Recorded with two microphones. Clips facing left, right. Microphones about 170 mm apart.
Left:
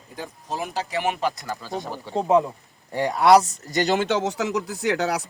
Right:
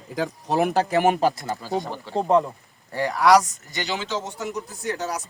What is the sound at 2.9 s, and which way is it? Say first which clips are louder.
Speech: left 1 dB; 20° left (ahead or behind).